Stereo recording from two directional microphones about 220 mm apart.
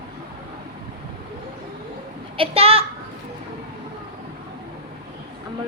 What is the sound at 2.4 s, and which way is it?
Speech, 25° right (ahead or behind).